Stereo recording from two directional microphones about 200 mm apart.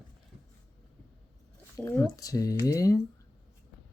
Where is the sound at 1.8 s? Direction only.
15° left (ahead or behind).